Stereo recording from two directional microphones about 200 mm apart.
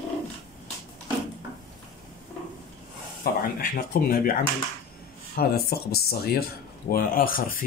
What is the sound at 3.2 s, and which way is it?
Speech, 45° left (ahead or behind).